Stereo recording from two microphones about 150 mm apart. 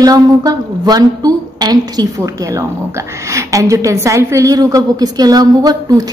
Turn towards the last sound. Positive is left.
turn(degrees=-25)  # may be behind; listen again after turning